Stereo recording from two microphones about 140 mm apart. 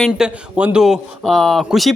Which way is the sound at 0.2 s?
10° right (ahead or behind).